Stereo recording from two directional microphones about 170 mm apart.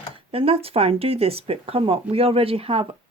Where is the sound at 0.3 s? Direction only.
35° right (ahead or behind).